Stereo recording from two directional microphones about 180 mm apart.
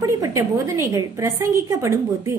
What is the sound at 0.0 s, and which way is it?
A woman's voice, 15° right (ahead or behind).